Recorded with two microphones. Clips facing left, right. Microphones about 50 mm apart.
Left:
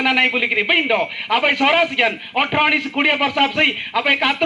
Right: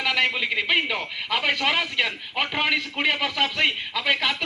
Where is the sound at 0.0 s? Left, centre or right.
Left.